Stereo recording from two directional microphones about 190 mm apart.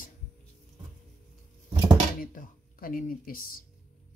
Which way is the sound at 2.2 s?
45° left (ahead or behind).